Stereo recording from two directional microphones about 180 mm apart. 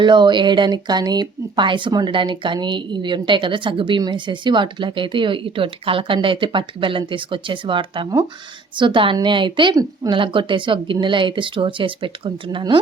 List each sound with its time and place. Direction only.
0.0 s speech: 25° right (ahead or behind)